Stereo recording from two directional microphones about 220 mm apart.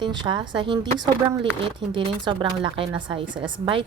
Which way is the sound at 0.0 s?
20° right (ahead or behind).